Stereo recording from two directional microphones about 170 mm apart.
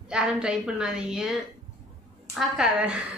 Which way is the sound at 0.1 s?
5° right (ahead or behind).